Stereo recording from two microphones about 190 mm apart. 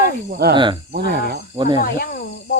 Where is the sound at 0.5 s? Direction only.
25° right (ahead or behind).